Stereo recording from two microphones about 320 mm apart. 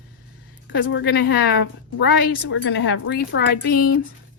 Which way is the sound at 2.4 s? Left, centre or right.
Left.